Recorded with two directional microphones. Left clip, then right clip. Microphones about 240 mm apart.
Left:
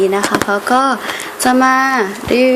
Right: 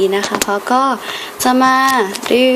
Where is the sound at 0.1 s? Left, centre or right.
Centre.